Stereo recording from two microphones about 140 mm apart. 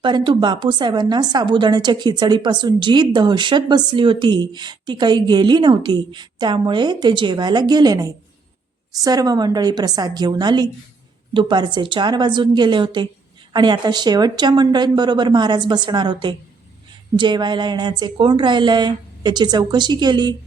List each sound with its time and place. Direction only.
0.0 s a woman's voice: 35° right (ahead or behind)